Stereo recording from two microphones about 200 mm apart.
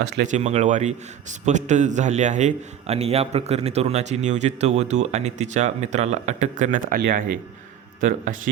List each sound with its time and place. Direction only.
0.3 s a man's voice: 35° right (ahead or behind)